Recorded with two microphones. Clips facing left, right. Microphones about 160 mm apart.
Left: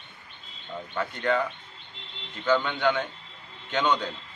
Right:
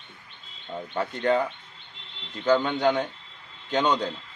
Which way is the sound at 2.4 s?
40° right (ahead or behind).